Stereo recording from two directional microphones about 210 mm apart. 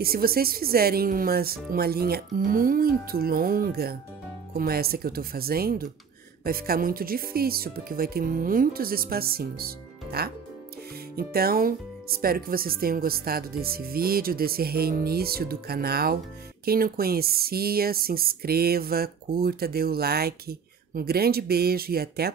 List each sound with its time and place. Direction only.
0.0 s speech: 45° right (ahead or behind)